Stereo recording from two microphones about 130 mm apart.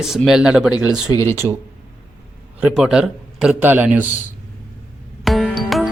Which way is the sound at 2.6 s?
5° right (ahead or behind).